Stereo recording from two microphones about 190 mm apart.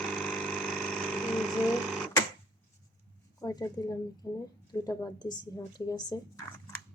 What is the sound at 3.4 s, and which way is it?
A woman's voice, 20° left (ahead or behind).